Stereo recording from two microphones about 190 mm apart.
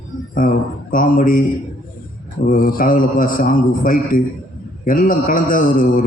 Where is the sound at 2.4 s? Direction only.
50° left (ahead or behind).